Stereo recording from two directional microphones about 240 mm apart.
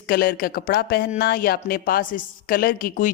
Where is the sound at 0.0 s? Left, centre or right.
Left.